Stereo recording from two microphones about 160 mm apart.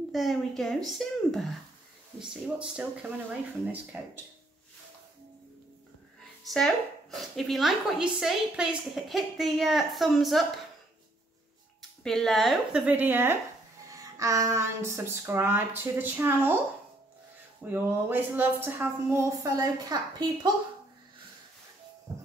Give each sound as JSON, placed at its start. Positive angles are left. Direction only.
{"t": 0.1, "sound": "a woman's voice", "side_deg": 0}
{"t": 6.5, "sound": "a woman's voice", "side_deg": 5}
{"t": 12.0, "sound": "a woman's voice", "side_deg": 5}
{"t": 12.8, "sound": "a woman's voice", "side_deg": -10}
{"t": 17.6, "sound": "a woman's voice", "side_deg": -10}